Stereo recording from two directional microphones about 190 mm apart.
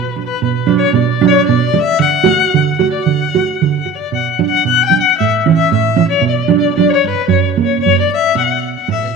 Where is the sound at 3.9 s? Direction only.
Centre (ahead or behind).